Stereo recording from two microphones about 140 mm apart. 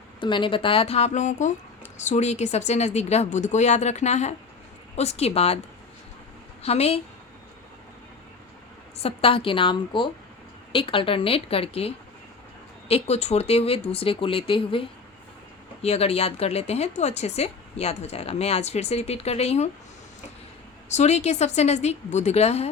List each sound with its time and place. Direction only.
0.2 s speech: 35° left (ahead or behind)
6.6 s speech: 50° left (ahead or behind)
9.0 s a woman's voice: 45° left (ahead or behind)
20.9 s speech: 55° left (ahead or behind)